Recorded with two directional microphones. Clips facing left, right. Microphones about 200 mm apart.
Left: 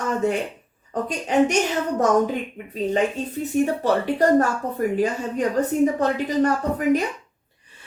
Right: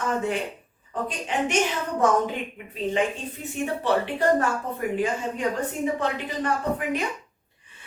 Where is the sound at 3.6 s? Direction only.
40° left (ahead or behind).